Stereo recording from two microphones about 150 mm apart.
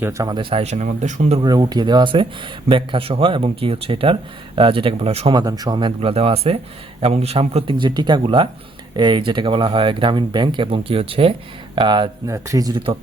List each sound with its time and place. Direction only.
0.0 s a man's voice: 20° right (ahead or behind)
0.6 s speech: 45° right (ahead or behind)
1.5 s speech: 25° right (ahead or behind); by 5.3 s 40° right (ahead or behind)
5.3 s speech: 25° right (ahead or behind)
12.3 s a man's voice: 20° right (ahead or behind)